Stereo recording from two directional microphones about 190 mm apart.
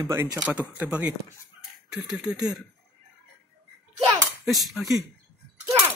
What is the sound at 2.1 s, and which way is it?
Speech, 5° right (ahead or behind).